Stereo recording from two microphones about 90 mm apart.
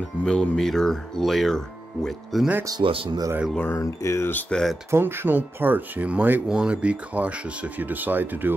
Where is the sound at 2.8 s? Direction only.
90° right.